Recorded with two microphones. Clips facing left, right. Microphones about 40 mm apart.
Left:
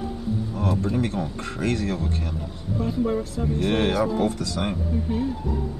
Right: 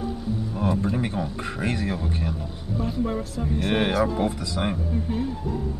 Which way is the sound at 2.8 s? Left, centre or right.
Centre.